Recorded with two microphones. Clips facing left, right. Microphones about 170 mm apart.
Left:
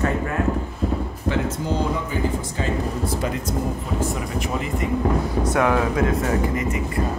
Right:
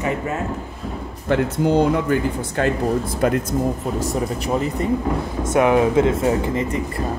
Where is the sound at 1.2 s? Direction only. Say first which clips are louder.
Right 6 dB; 60° right (ahead or behind).